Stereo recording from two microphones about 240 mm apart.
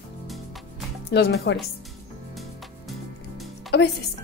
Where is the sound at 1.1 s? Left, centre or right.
Left.